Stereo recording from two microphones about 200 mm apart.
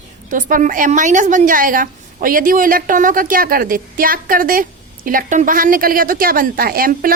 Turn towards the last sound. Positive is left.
turn(degrees=-45)  # may be behind; listen again after turning